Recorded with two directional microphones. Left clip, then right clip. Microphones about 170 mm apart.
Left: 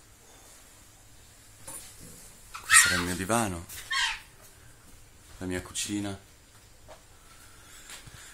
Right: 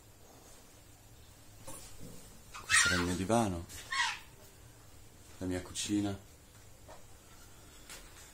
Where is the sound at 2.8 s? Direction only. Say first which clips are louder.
Left 4 dB; 10° left (ahead or behind).